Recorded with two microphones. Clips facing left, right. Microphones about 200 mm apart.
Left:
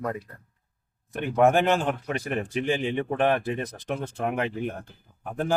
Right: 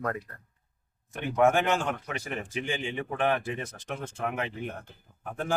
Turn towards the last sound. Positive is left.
turn(degrees=35)  # may be behind; listen again after turning